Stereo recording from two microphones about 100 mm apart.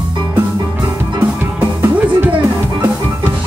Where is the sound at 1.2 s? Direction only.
20° right (ahead or behind).